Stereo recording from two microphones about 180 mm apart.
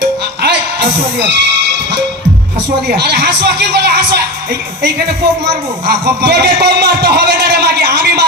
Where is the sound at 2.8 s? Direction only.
65° right (ahead or behind).